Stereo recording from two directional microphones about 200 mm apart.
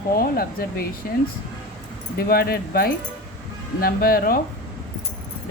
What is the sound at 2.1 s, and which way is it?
Speech, 50° left (ahead or behind).